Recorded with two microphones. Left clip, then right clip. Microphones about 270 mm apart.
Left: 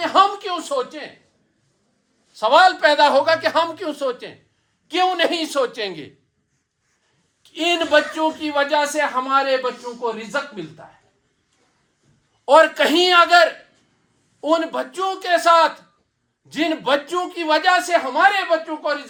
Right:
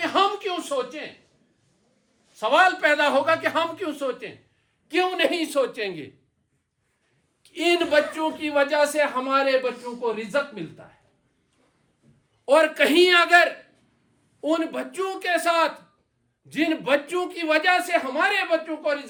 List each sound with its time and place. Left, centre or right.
0.0 s speech: left
2.4 s a man's voice: left
7.4 s speech: centre
12.5 s speech: centre